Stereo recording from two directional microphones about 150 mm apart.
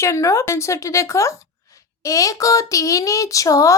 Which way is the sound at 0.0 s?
20° left (ahead or behind).